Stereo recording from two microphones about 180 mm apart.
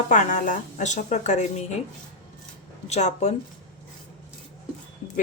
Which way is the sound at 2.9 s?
40° left (ahead or behind).